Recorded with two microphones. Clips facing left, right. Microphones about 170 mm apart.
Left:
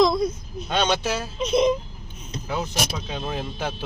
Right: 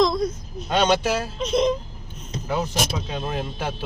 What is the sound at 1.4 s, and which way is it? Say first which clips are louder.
Music: left 2 dB; 5° left (ahead or behind).